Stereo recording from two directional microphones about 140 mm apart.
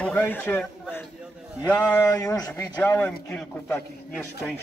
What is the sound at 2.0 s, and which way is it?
Speech, 25° left (ahead or behind).